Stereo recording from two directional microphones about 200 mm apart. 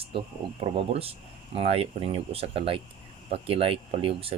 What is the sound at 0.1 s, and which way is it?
Speech, 25° right (ahead or behind).